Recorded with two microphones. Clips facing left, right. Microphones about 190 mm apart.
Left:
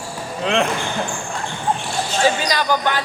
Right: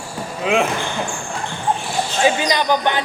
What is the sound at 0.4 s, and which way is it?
Speech, 5° right (ahead or behind).